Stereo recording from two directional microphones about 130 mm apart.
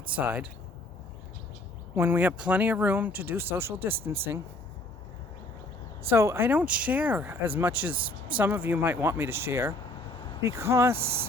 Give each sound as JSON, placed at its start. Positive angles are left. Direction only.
{"t": 0.1, "sound": "speech", "side_deg": -10}
{"t": 2.0, "sound": "speech", "side_deg": -15}
{"t": 6.1, "sound": "speech", "side_deg": -20}